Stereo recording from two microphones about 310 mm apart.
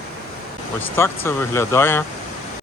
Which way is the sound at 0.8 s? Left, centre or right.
Centre.